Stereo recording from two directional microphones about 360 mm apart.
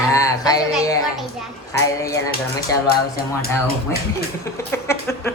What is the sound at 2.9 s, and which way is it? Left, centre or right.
Speech, left.